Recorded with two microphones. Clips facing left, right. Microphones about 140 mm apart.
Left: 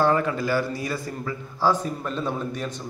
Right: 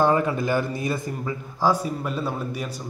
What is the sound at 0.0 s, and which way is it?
A man's voice, 15° right (ahead or behind).